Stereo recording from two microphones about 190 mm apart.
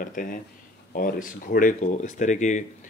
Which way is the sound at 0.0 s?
45° left (ahead or behind).